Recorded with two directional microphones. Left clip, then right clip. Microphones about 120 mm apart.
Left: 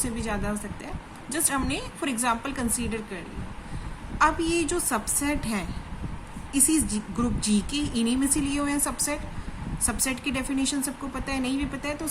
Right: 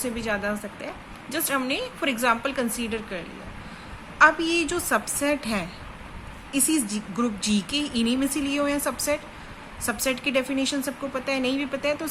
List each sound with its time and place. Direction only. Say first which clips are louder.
0.0 s speech: right 4 dB; 15° right (ahead or behind)
4.2 s speech: right 4 dB; 20° right (ahead or behind)